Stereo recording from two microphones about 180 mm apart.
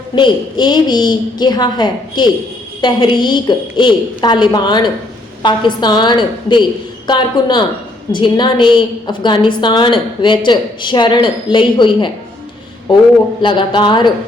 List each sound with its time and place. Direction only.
0.2 s a woman's voice: 25° left (ahead or behind)